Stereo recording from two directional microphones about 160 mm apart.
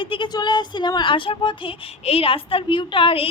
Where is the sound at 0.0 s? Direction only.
30° left (ahead or behind).